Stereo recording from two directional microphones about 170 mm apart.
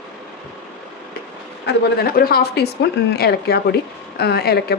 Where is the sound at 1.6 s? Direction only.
65° left (ahead or behind).